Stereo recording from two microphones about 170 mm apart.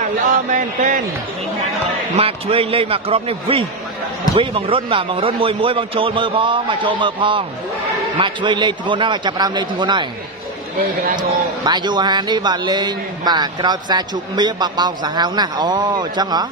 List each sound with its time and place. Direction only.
0.5 s a man's voice: 50° right (ahead or behind)
2.1 s a man's voice: 35° right (ahead or behind)
11.1 s a man's voice: 25° right (ahead or behind)